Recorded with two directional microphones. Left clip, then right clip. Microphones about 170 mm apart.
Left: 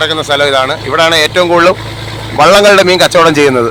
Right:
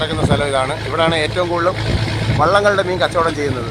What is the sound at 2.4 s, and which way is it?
A man's voice, 30° left (ahead or behind).